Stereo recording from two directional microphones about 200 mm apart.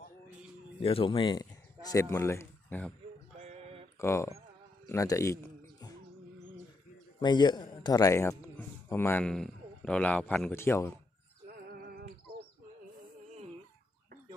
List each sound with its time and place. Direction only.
0.8 s speech: 25° left (ahead or behind); by 2.9 s 10° left (ahead or behind)
3.3 s male singing: 30° right (ahead or behind)
4.0 s speech: 15° left (ahead or behind)
4.9 s a sound: 15° left (ahead or behind)
7.2 s a man's voice: 20° left (ahead or behind)
11.4 s music: 50° right (ahead or behind)